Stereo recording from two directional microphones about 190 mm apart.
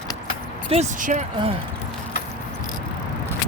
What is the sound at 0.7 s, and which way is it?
Speech, 40° right (ahead or behind).